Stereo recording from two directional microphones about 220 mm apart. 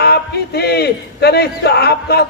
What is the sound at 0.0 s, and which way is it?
A man's voice, 45° left (ahead or behind).